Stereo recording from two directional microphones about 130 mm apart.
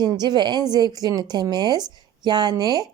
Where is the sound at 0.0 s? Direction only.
35° right (ahead or behind).